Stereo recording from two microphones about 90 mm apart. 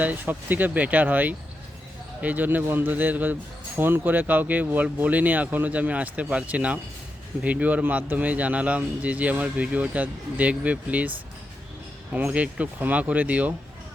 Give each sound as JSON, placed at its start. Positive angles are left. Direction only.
{"t": 0.0, "sound": "speech", "side_deg": -20}
{"t": 12.1, "sound": "speech", "side_deg": -15}